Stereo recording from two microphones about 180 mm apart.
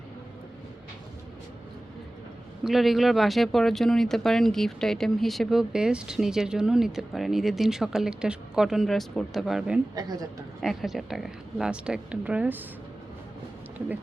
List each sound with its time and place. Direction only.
2.6 s speech: centre (ahead or behind)
9.9 s a woman's voice: 20° right (ahead or behind)
10.6 s speech: centre (ahead or behind)